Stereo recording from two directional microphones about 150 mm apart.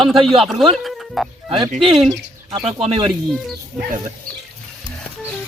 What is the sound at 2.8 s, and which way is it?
Speech, 40° right (ahead or behind).